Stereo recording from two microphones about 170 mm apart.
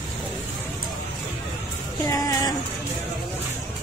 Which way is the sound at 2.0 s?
20° left (ahead or behind).